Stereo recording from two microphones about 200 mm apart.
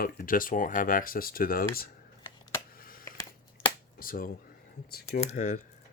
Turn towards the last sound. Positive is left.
turn(degrees=35)  # may be behind; listen again after turning